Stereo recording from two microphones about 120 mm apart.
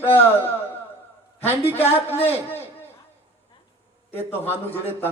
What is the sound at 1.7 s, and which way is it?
Speech, 15° left (ahead or behind).